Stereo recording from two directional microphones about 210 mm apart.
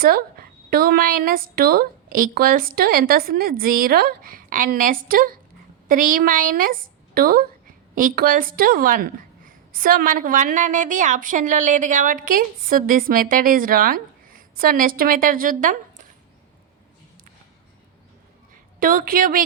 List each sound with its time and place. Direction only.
0.0 s a woman's voice: 45° right (ahead or behind)
18.8 s a woman's voice: 40° right (ahead or behind)